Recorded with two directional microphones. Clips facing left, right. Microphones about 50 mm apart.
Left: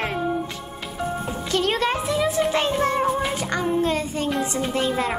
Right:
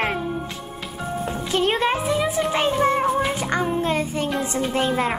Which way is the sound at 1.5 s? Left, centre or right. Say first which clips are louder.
Right 1 dB; right.